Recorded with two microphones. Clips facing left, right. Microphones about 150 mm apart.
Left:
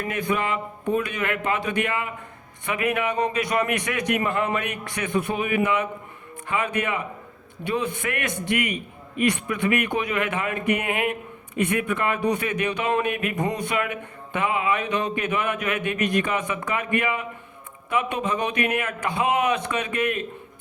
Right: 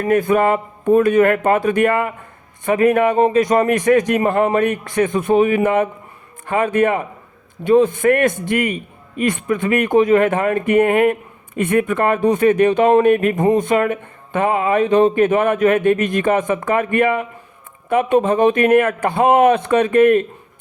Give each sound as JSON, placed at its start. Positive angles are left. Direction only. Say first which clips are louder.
{"t": 0.0, "sound": "speech", "louder": "right 11 dB", "side_deg": -45}